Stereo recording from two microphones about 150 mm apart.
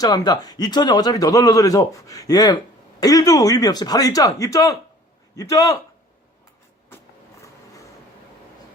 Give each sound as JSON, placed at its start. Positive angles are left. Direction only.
{"t": 0.0, "sound": "a man's voice", "side_deg": 25}